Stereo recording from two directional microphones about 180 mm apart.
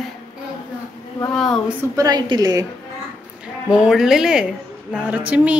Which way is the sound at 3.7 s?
5° right (ahead or behind).